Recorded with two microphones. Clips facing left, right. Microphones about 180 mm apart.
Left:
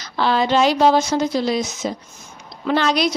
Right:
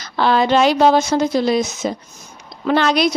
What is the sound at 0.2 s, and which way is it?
A woman's voice, 55° right (ahead or behind).